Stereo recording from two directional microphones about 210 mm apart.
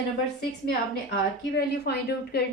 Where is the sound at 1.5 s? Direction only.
50° left (ahead or behind).